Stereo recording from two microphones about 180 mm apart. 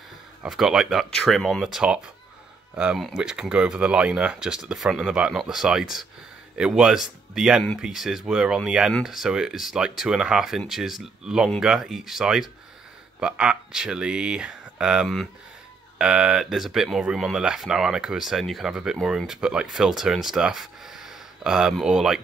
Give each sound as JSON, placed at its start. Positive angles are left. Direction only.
{"t": 0.4, "sound": "speech", "side_deg": 0}